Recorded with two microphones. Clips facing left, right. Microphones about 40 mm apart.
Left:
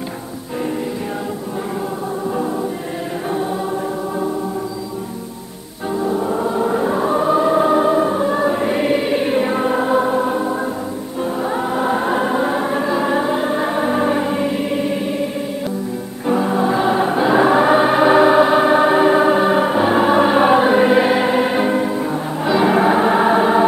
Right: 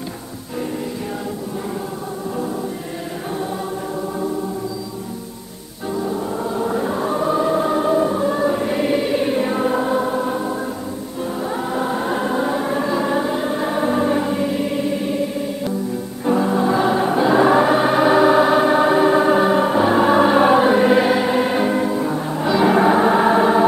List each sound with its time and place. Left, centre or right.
5.9 s choir: centre
16.3 s choir: centre